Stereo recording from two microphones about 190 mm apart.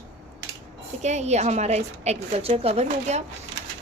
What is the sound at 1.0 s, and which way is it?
A woman's voice, 35° right (ahead or behind).